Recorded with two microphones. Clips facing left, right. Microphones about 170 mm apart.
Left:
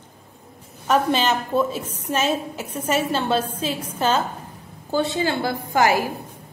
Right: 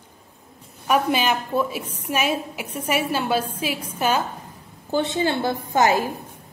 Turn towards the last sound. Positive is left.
turn(degrees=-20)  # may be behind; listen again after turning